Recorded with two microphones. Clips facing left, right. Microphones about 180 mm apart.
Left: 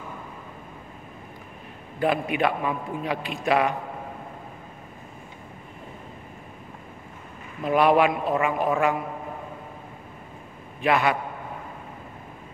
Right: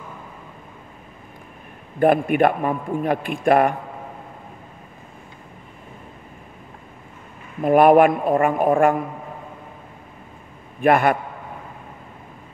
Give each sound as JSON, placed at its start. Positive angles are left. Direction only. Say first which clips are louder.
{"t": 2.0, "sound": "a man's voice", "louder": "right 7 dB", "side_deg": -50}
{"t": 7.6, "sound": "a man's voice", "louder": "right 7 dB", "side_deg": -50}
{"t": 10.8, "sound": "a man's voice", "louder": "right 6 dB", "side_deg": -50}